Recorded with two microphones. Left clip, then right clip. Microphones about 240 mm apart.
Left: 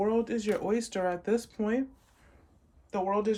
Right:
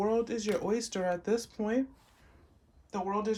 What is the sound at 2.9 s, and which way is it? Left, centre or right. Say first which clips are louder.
Speech: left 4 dB; centre.